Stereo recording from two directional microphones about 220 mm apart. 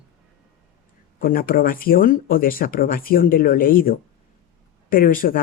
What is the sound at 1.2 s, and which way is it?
Speech, 40° left (ahead or behind).